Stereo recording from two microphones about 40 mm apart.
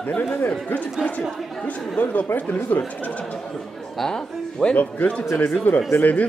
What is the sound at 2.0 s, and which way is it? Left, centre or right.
Speech, left.